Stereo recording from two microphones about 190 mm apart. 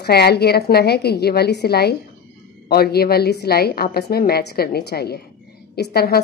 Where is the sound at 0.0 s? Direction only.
60° left (ahead or behind).